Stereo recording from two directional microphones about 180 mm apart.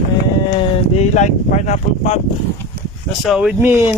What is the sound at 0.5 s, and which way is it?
Speech, 40° left (ahead or behind).